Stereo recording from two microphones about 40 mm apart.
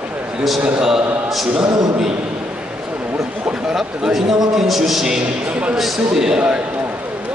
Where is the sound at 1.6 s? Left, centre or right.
Centre.